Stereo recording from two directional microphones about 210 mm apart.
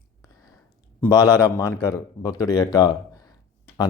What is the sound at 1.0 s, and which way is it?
A man's voice, 15° left (ahead or behind).